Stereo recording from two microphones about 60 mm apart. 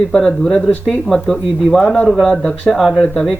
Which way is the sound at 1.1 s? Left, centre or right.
Centre.